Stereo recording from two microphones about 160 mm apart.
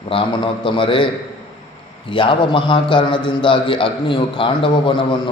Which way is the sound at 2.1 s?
30° left (ahead or behind).